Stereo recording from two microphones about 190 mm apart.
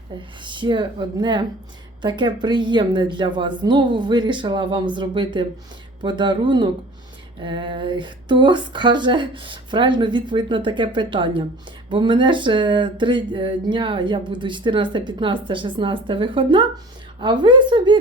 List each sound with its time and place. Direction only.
0.4 s speech: 25° right (ahead or behind)